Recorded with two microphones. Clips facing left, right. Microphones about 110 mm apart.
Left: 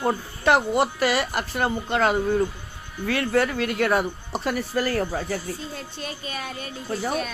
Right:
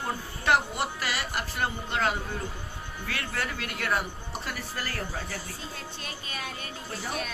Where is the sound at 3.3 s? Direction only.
80° left.